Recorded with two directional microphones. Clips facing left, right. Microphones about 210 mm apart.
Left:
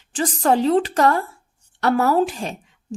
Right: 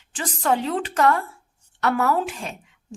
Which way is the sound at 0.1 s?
35° left (ahead or behind).